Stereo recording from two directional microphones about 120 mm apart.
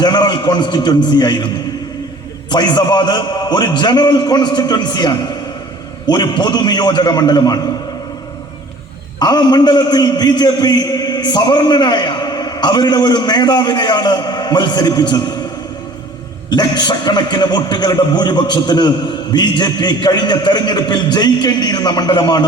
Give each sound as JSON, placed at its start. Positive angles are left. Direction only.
{"t": 0.0, "sound": "a man's voice", "side_deg": 35}
{"t": 2.5, "sound": "a man's voice", "side_deg": 35}
{"t": 9.1, "sound": "a man's voice", "side_deg": 35}
{"t": 16.5, "sound": "a man's voice", "side_deg": 35}